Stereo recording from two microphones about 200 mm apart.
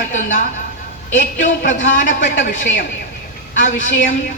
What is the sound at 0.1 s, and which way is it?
A woman's voice, 40° left (ahead or behind).